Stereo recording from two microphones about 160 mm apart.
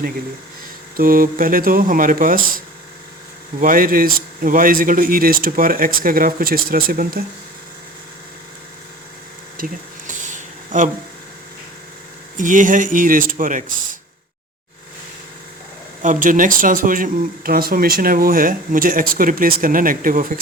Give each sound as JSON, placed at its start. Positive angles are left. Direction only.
{"t": 0.9, "sound": "speech", "side_deg": -65}
{"t": 3.6, "sound": "speech", "side_deg": -60}
{"t": 9.6, "sound": "speech", "side_deg": -60}
{"t": 10.1, "sound": "a sound", "side_deg": -55}
{"t": 12.4, "sound": "speech", "side_deg": -55}
{"t": 16.2, "sound": "speech", "side_deg": -55}